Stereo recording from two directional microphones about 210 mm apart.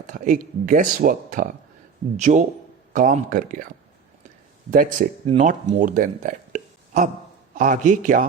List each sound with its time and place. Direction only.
0.1 s speech: 40° right (ahead or behind)
4.7 s speech: 40° right (ahead or behind)